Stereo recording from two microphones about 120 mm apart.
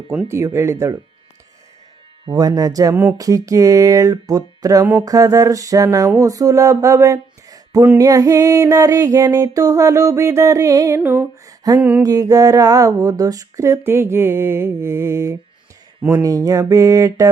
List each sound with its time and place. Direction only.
0.3 s music: 25° right (ahead or behind)
2.2 s speech: 35° right (ahead or behind)
2.9 s a sound: 15° right (ahead or behind)
3.2 s music: 30° right (ahead or behind)
11.8 s a sound: 15° right (ahead or behind)
12.0 s music: 30° right (ahead or behind)